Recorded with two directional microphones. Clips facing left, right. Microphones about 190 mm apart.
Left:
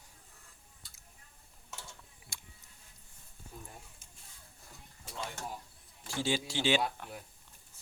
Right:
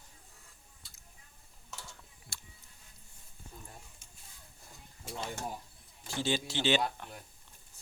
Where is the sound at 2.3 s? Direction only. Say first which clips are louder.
Right 1 dB; 15° left (ahead or behind).